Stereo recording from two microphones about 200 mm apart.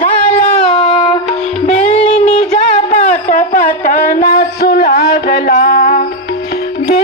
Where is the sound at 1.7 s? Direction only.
35° left (ahead or behind).